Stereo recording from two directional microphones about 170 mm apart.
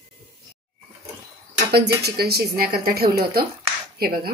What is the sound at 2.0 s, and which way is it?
Speech, 70° right (ahead or behind).